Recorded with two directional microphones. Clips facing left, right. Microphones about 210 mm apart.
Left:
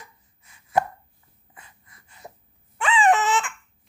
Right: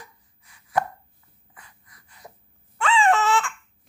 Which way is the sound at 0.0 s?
25° left (ahead or behind).